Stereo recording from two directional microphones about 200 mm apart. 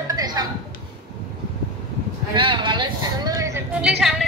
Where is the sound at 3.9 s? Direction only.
Centre (ahead or behind).